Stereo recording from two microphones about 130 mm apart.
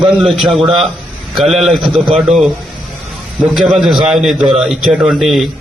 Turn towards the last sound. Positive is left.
turn(degrees=0)  # may be behind; listen again after turning